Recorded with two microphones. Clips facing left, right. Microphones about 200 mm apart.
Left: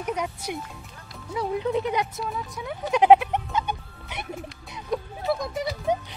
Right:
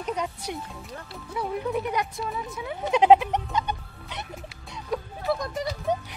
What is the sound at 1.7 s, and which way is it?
Speech, 20° left (ahead or behind).